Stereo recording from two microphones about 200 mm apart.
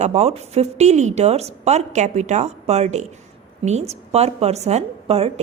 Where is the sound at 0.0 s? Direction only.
35° right (ahead or behind).